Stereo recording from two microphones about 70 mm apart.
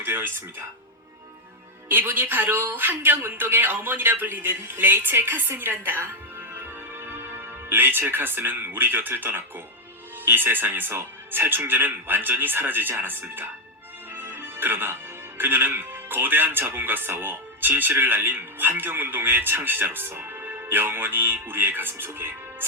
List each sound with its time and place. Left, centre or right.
0.0 s music: right
1.9 s speech: right
6.5 s music: right
10.2 s speech: right
14.1 s music: right
15.4 s speech: right